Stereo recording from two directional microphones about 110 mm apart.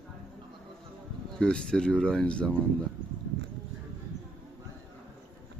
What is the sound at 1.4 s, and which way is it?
Speech, 10° left (ahead or behind).